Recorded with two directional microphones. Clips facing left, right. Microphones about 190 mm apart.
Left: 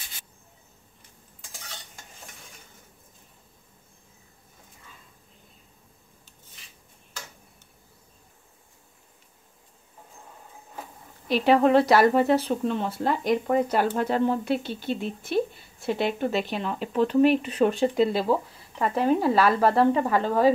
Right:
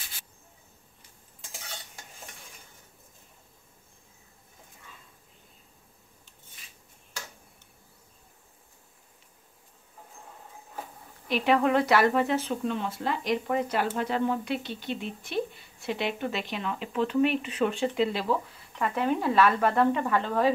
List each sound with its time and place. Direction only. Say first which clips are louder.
11.2 s speech: left 4 dB; 35° left (ahead or behind)